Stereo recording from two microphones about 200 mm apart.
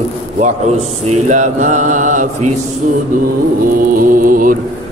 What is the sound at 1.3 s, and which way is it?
Mantra, 40° right (ahead or behind).